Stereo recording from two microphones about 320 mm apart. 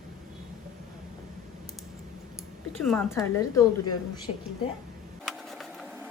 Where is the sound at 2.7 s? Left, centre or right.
Centre.